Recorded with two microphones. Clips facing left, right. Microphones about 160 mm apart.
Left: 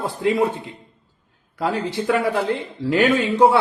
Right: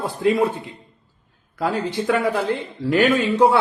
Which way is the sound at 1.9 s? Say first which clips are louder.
Left 1 dB; 25° left (ahead or behind).